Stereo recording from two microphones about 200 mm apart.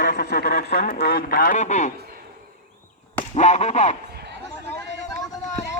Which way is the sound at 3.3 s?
35° left (ahead or behind).